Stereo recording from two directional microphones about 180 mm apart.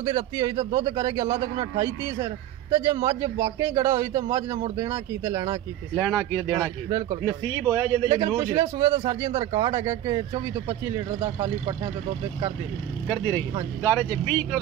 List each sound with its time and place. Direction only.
0.1 s speech: 20° right (ahead or behind)
5.9 s speech: 5° left (ahead or behind)
6.6 s speech: 15° right (ahead or behind)
8.9 s speech: 35° right (ahead or behind)
13.8 s speech: 10° left (ahead or behind)